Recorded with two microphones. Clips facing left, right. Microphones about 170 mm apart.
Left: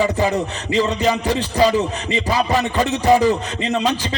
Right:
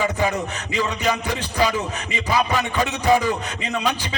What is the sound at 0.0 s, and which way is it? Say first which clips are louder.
Speech: left 4 dB; 40° left (ahead or behind).